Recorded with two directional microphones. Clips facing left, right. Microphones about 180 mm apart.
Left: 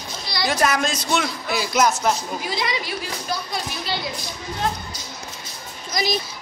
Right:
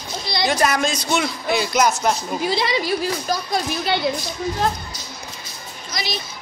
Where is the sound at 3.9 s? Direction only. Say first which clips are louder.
Right 6 dB; 60° right (ahead or behind).